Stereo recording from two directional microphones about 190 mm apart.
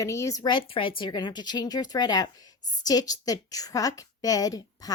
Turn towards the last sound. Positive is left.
turn(degrees=20)  # may be behind; listen again after turning